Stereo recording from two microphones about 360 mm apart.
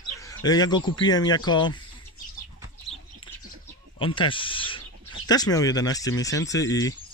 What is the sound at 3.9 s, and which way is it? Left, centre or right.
Speech, centre.